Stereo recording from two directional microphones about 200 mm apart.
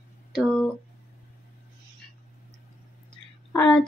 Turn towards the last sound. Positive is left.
turn(degrees=10)  # may be behind; listen again after turning